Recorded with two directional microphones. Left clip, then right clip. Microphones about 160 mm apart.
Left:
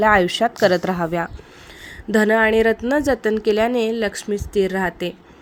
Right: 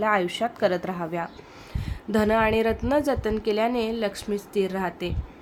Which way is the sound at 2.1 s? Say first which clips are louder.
Left 6 dB; 30° left (ahead or behind).